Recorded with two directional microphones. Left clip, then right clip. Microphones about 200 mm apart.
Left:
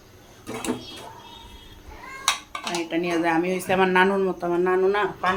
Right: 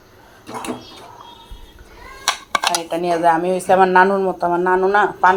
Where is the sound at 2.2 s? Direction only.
50° right (ahead or behind).